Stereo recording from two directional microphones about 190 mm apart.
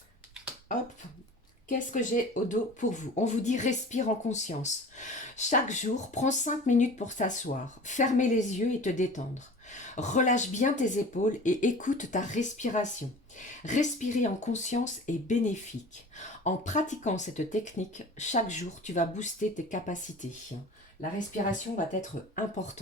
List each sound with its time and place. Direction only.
1.6 s speech: 40° left (ahead or behind)
22.4 s speech: 40° left (ahead or behind)